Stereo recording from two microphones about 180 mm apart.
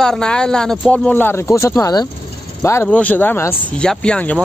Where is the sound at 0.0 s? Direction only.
5° left (ahead or behind).